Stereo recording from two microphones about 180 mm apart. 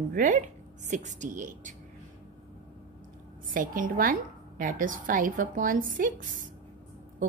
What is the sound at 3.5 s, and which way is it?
Speech, 50° right (ahead or behind).